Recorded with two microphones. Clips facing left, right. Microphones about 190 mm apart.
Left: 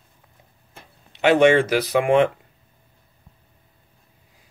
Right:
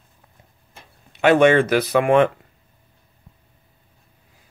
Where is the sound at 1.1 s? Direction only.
15° left (ahead or behind).